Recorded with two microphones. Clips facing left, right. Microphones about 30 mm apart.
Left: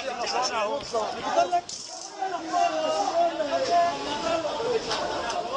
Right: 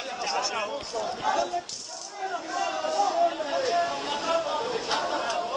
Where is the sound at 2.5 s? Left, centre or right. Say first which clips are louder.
Left 4 dB; centre.